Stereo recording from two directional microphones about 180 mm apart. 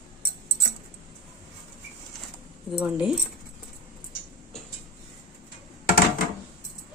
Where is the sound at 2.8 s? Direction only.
5° right (ahead or behind).